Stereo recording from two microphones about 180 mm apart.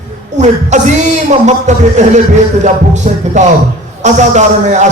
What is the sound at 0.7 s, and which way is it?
A man's voice, 40° right (ahead or behind).